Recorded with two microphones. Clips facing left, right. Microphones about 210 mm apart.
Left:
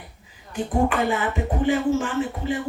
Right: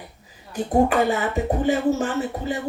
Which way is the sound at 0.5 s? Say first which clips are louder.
Right 3 dB; 40° right (ahead or behind).